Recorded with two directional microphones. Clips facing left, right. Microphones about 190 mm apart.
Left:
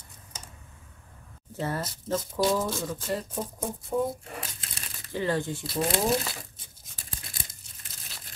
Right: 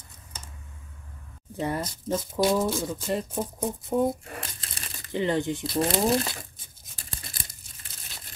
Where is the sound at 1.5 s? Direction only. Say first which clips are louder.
Right 2 dB; 15° right (ahead or behind).